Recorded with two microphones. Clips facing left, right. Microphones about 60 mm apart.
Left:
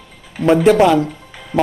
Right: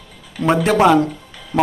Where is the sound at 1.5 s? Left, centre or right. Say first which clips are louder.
Left 1 dB; left.